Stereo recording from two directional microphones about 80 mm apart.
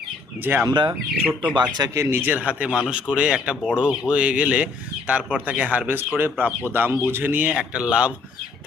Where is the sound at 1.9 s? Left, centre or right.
Right.